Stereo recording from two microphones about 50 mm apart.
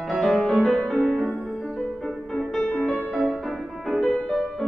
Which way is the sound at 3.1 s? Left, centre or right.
Centre.